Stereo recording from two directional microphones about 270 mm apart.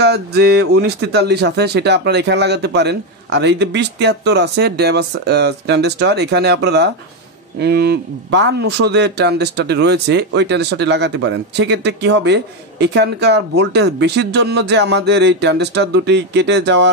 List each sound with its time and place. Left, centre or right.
0.0 s speech: right